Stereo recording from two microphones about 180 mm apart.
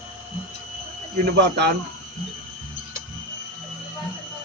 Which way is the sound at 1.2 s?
70° right (ahead or behind).